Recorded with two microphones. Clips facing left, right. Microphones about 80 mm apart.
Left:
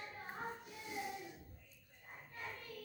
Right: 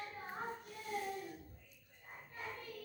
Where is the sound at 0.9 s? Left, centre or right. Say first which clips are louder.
Right 4 dB; centre.